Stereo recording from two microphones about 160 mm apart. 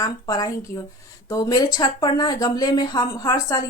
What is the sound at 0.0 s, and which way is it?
A woman's voice, 25° left (ahead or behind).